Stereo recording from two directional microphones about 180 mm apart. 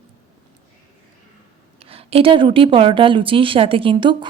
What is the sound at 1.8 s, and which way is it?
Speech, 35° right (ahead or behind).